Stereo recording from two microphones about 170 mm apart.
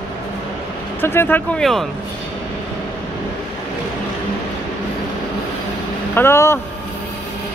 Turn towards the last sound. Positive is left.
turn(degrees=15)  # may be behind; listen again after turning